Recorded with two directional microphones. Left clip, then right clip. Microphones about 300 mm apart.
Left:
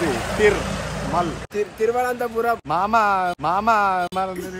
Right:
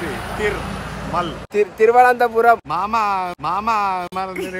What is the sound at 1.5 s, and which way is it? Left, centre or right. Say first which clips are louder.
Speech: right 11 dB; right.